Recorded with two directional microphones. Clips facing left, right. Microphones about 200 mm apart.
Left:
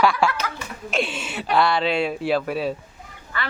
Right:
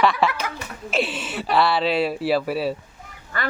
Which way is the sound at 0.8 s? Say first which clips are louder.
Right 1 dB; 5° right (ahead or behind).